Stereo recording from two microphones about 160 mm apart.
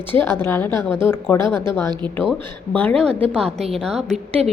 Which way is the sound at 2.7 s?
10° left (ahead or behind).